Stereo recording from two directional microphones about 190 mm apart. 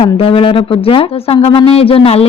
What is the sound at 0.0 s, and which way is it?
Speech, 30° left (ahead or behind).